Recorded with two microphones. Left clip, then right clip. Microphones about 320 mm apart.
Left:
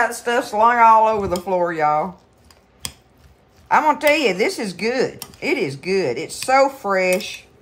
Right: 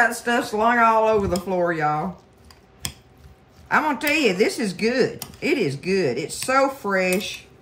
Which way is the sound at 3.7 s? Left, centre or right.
Centre.